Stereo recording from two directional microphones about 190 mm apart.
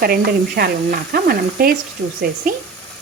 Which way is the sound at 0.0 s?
55° right (ahead or behind).